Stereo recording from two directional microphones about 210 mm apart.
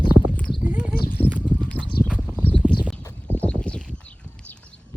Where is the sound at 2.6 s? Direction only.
10° left (ahead or behind).